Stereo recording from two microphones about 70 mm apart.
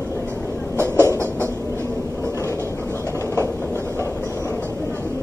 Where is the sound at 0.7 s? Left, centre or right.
Right.